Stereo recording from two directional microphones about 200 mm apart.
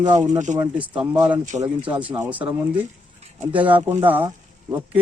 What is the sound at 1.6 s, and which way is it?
Speech, 5° right (ahead or behind).